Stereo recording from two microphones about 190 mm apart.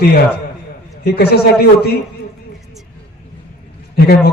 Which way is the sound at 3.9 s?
50° left (ahead or behind).